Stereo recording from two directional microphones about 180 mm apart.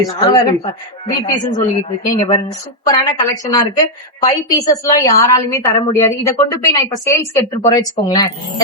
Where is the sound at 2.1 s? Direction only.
25° left (ahead or behind).